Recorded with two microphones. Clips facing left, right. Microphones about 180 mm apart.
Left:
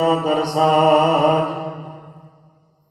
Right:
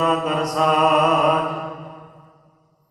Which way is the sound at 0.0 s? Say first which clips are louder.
Left 3 dB; 35° left (ahead or behind).